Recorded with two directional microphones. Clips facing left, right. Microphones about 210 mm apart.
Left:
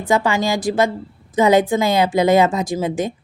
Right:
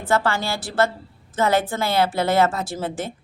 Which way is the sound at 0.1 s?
15° left (ahead or behind).